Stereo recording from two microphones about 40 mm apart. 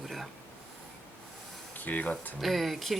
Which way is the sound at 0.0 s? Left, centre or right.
Centre.